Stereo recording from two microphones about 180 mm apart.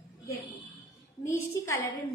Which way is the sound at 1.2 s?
15° left (ahead or behind).